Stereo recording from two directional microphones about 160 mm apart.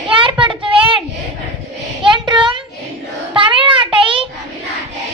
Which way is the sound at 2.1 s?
30° right (ahead or behind).